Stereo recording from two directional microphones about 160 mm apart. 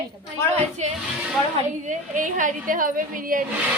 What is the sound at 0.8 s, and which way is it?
A woman's voice, 45° right (ahead or behind).